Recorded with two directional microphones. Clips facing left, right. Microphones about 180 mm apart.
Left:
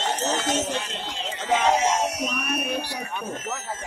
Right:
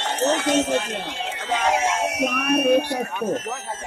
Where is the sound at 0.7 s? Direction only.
55° right (ahead or behind).